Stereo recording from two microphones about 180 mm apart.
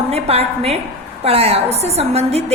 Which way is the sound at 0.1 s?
35° right (ahead or behind).